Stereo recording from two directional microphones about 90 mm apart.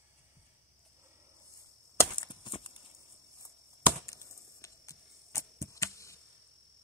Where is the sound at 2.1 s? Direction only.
65° left (ahead or behind).